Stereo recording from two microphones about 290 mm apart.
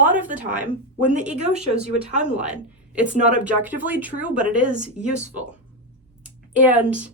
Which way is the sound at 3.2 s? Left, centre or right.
Right.